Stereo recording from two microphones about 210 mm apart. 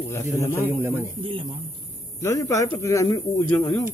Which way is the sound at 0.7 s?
10° right (ahead or behind).